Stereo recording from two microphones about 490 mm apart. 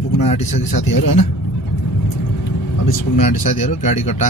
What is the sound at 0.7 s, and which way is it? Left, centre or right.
Speech, left.